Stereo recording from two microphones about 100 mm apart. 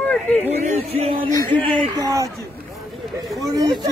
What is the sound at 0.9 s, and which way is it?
Speech, 85° right.